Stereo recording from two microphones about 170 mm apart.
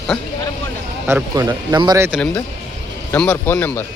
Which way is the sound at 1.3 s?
20° right (ahead or behind).